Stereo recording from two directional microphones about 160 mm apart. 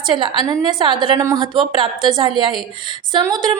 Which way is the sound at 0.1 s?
30° right (ahead or behind).